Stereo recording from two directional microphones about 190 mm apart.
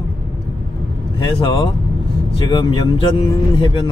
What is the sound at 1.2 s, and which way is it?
A man's voice, 25° left (ahead or behind).